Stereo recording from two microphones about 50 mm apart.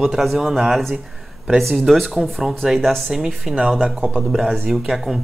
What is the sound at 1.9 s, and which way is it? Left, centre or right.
Speech, centre.